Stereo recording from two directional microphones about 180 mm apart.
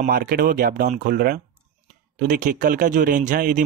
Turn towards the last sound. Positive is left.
turn(degrees=-45)  # may be behind; listen again after turning